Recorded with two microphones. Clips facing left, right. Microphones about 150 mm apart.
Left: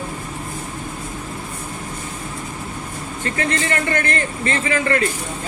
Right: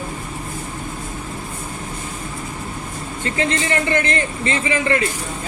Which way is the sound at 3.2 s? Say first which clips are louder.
Right 1 dB; 20° right (ahead or behind).